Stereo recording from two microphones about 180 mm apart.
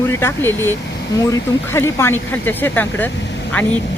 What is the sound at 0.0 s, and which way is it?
Speech, 15° left (ahead or behind).